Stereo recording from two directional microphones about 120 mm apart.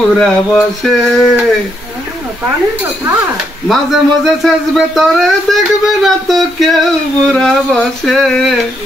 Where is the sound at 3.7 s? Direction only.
Centre (ahead or behind).